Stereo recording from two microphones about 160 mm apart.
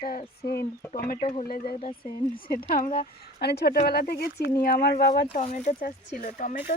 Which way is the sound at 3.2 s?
85° left.